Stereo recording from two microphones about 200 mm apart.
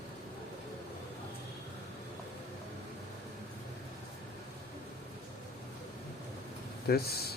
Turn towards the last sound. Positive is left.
turn(degrees=50)  # may be behind; listen again after turning